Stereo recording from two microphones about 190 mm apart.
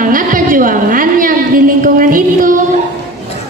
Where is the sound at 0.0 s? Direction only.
45° right (ahead or behind).